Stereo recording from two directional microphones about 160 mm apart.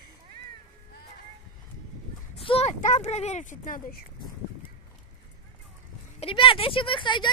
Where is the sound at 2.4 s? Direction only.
40° left (ahead or behind); by 4.0 s 60° left (ahead or behind).